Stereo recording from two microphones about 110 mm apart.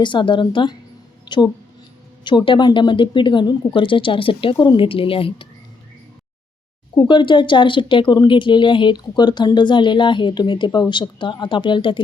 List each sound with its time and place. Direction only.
0.0 s speech: 45° left (ahead or behind)
1.2 s a sound: 40° left (ahead or behind)
2.2 s speech: 50° left (ahead or behind)
6.9 s speech: 45° left (ahead or behind)